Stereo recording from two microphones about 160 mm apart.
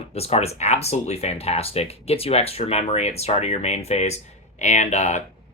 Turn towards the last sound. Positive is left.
turn(degrees=45)  # may be behind; listen again after turning